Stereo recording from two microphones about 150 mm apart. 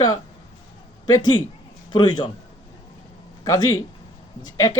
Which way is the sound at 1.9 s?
30° left (ahead or behind).